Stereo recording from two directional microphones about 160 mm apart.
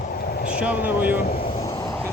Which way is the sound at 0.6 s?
10° right (ahead or behind).